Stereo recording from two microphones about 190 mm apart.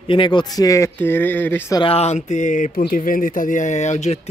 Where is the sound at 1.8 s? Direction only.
30° left (ahead or behind).